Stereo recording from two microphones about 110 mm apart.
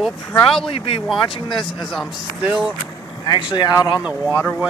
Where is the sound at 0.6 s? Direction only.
55° left (ahead or behind).